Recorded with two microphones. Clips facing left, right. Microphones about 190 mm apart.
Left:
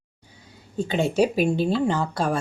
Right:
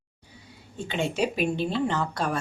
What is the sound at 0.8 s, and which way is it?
A woman's voice, 35° left (ahead or behind).